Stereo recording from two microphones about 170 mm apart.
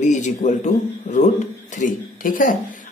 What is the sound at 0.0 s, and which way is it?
Speech, 45° left (ahead or behind).